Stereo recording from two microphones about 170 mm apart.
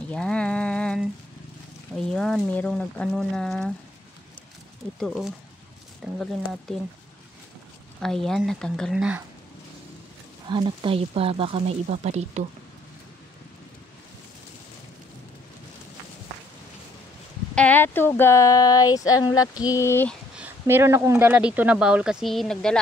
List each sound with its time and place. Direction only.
0.1 s a sound: 5° left (ahead or behind)
2.0 s speech: 5° left (ahead or behind)
4.9 s speech: centre (ahead or behind)
8.0 s speech: centre (ahead or behind)
10.4 s speech: 30° right (ahead or behind)
17.6 s speech: 10° left (ahead or behind)
20.3 s speech: 10° right (ahead or behind)